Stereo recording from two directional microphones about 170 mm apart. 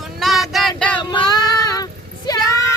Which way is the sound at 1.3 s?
20° left (ahead or behind).